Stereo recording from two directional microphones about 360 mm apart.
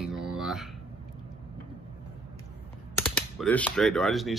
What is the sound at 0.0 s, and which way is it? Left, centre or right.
Music, centre.